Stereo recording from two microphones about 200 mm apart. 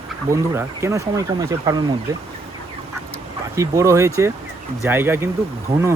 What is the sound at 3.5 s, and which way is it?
Speech, 15° right (ahead or behind).